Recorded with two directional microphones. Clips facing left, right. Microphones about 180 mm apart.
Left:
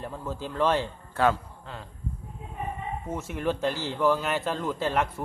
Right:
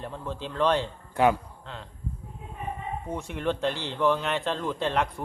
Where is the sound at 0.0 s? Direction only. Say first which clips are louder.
Left 1 dB; 5° left (ahead or behind).